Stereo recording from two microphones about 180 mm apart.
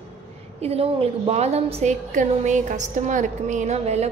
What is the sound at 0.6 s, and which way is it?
A woman's voice, 35° right (ahead or behind).